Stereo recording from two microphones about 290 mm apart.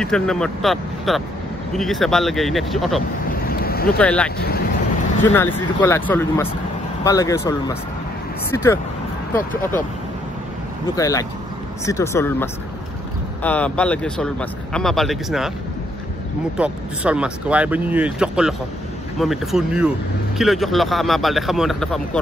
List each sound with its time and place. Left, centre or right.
0.0 s speech: centre
3.4 s boat: left
4.0 s speech: centre
5.3 s speech: centre
11.0 s speech: centre
16.5 s speech: centre